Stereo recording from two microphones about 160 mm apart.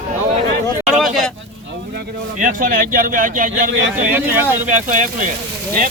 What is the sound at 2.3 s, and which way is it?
Speech, 55° right (ahead or behind).